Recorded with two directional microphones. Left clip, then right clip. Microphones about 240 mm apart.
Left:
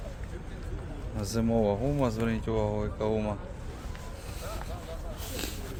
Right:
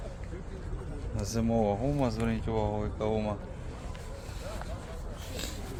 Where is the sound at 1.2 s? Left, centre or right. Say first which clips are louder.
Left 2 dB; centre.